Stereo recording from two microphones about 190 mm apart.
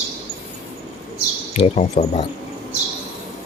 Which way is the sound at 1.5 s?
35° left (ahead or behind).